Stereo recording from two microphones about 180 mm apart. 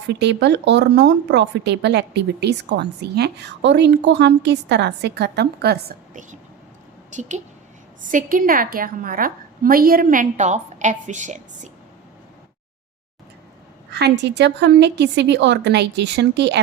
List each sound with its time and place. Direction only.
0.1 s speech: 70° right (ahead or behind)
7.1 s a woman's voice: 40° right (ahead or behind)
13.9 s speech: 70° right (ahead or behind)